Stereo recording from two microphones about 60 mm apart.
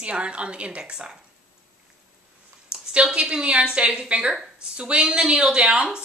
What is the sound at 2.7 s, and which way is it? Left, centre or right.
A woman's voice, centre.